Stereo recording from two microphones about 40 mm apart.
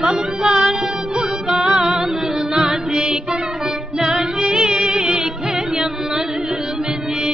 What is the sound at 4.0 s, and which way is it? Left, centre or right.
Music, centre.